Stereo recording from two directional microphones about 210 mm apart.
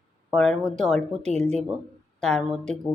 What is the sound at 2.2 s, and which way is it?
Speech, centre (ahead or behind).